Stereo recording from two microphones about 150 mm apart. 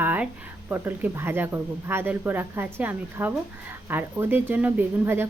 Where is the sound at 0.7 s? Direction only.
15° right (ahead or behind).